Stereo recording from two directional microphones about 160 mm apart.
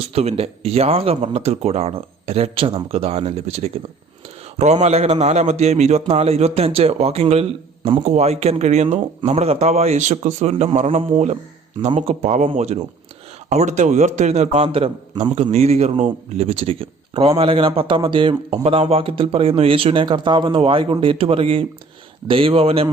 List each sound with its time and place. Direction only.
0.0 s speech: 40° right (ahead or behind)